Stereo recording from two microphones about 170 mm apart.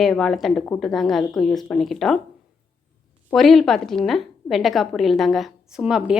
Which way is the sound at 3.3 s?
Centre (ahead or behind).